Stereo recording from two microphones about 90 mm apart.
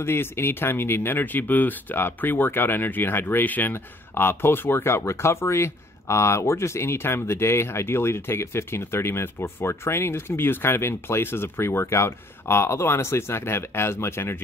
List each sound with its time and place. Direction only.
0.0 s speech: 25° left (ahead or behind)